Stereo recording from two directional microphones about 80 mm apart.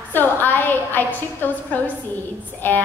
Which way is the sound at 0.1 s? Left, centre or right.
Left.